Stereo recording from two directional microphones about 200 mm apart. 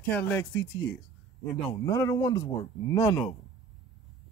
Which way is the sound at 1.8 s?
15° left (ahead or behind).